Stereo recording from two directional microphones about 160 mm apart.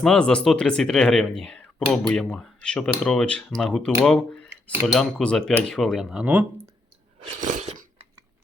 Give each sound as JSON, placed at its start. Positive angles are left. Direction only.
{"t": 0.0, "sound": "speech", "side_deg": 5}
{"t": 7.2, "sound": "crunch", "side_deg": -50}